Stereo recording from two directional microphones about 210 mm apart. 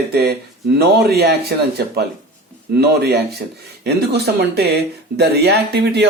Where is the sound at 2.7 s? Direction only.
50° right (ahead or behind).